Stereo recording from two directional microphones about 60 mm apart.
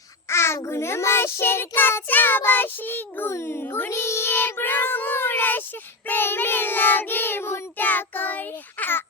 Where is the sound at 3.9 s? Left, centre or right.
Left.